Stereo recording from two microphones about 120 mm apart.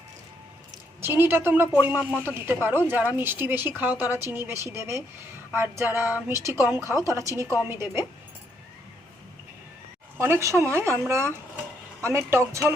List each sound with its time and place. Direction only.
1.0 s a woman's voice: 20° right (ahead or behind)
10.2 s speech: 20° right (ahead or behind)